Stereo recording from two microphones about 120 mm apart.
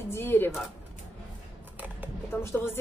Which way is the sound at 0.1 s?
20° left (ahead or behind).